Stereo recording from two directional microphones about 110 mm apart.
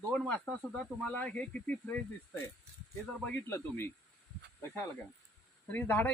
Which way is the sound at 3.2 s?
15° left (ahead or behind).